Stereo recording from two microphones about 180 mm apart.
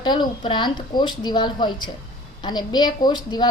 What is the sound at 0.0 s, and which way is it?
A woman's voice, 25° left (ahead or behind).